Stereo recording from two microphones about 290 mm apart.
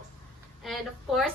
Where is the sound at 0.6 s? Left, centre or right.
Centre.